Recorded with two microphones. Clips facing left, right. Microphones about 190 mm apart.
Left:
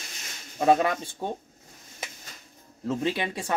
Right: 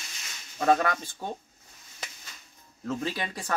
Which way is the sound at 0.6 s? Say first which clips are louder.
Left 2 dB; 20° left (ahead or behind).